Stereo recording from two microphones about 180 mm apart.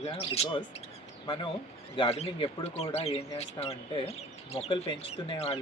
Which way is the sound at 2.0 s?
30° left (ahead or behind).